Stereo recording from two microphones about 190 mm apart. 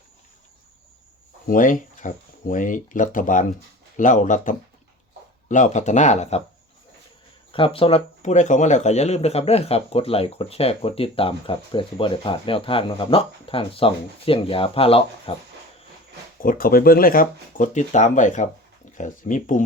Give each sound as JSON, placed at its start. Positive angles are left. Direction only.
{"t": 1.5, "sound": "speech", "side_deg": 45}
{"t": 7.5, "sound": "speech", "side_deg": 30}
{"t": 16.4, "sound": "speech", "side_deg": 50}